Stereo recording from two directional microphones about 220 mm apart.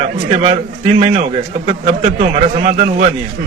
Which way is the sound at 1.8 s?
30° right (ahead or behind).